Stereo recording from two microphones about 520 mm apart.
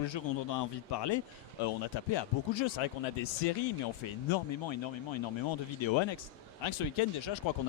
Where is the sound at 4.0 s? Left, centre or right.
Left.